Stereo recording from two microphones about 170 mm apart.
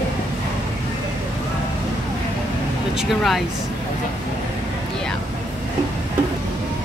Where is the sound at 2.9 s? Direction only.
Centre (ahead or behind).